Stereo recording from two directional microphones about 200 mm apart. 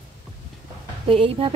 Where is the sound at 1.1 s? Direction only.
25° right (ahead or behind).